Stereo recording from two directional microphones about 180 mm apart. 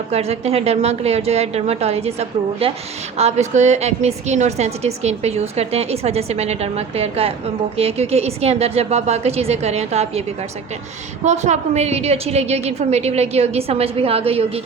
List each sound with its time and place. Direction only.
0.1 s a woman's voice: 35° right (ahead or behind)